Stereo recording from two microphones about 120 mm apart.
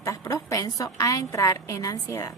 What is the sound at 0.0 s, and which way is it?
A woman's voice, 25° left (ahead or behind).